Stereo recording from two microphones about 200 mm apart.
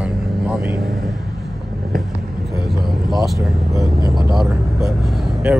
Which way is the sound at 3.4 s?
15° right (ahead or behind).